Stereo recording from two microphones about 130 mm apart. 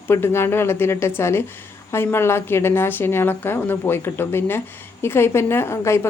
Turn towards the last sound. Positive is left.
turn(degrees=20)  # may be behind; listen again after turning